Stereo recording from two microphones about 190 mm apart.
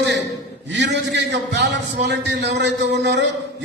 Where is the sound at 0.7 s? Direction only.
65° right (ahead or behind).